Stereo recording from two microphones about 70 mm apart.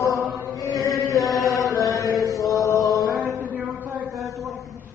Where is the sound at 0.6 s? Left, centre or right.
Left.